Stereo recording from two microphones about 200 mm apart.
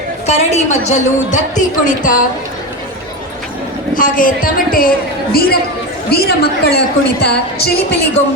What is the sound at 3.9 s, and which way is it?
A woman's voice, 45° left (ahead or behind).